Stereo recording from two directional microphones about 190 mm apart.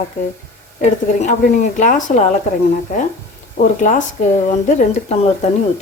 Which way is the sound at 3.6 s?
45° left (ahead or behind).